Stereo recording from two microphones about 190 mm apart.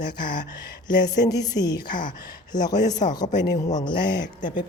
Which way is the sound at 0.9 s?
20° left (ahead or behind).